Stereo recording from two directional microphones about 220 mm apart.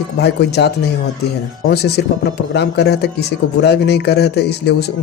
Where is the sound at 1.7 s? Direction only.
50° left (ahead or behind).